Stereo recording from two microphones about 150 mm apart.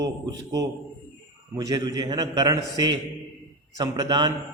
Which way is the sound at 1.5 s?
25° right (ahead or behind).